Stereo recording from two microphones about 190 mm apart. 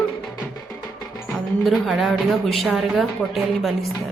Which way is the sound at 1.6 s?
Centre (ahead or behind).